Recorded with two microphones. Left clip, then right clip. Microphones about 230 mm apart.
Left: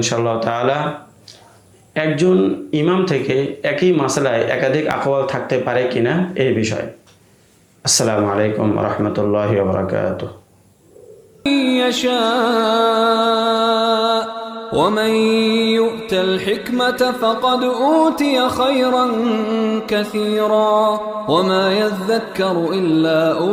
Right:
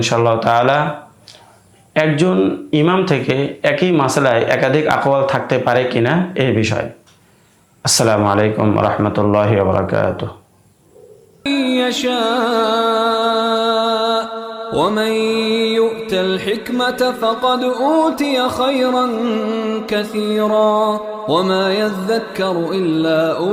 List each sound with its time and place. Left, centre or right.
0.0 s speech: right
1.9 s speech: right
11.4 s mantra: centre